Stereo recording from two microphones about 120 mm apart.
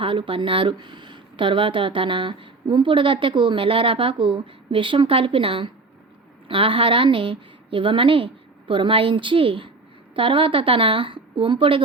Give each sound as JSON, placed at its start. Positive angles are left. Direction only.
{"t": 0.0, "sound": "speech", "side_deg": -50}